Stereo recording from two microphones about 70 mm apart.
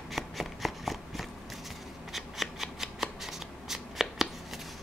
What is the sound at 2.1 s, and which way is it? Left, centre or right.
Shuffling cards, centre.